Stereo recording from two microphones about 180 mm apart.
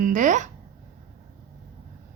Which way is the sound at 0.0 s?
45° right (ahead or behind).